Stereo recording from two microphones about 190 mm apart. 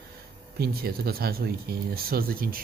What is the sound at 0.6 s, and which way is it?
A man's voice, 55° right (ahead or behind).